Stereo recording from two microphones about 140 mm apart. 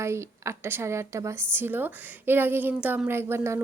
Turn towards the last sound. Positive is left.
turn(degrees=-20)  # may be behind; listen again after turning